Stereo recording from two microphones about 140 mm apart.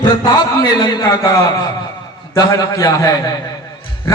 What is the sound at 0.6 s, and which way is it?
A man's voice, 30° left (ahead or behind).